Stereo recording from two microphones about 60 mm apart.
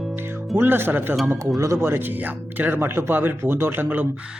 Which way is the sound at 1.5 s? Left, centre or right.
Right.